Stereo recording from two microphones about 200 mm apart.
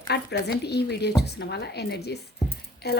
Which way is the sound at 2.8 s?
55° left (ahead or behind).